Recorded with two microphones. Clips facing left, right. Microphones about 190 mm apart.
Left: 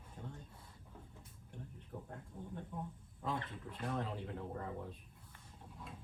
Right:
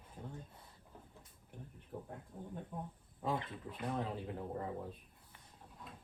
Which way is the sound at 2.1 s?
10° right (ahead or behind).